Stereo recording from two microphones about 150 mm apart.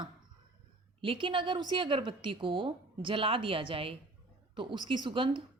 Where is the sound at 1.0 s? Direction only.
35° right (ahead or behind).